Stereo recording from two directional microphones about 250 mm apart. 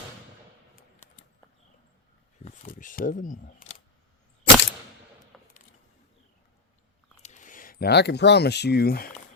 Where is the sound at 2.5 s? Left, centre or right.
Left.